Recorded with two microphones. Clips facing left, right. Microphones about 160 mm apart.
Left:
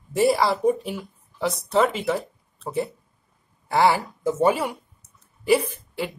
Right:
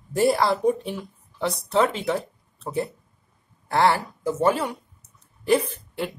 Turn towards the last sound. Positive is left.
turn(degrees=5)  # may be behind; listen again after turning